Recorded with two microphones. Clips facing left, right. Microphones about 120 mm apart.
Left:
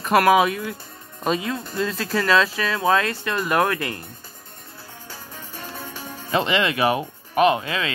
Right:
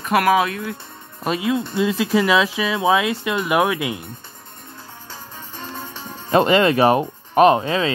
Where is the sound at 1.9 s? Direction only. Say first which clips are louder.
Right 3 dB; 15° right (ahead or behind).